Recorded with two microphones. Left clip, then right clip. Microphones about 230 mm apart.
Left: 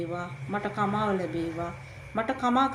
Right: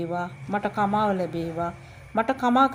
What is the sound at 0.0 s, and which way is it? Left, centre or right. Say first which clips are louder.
A woman's voice: right 5 dB; right.